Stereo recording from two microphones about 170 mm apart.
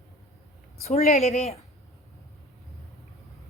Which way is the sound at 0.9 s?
40° left (ahead or behind).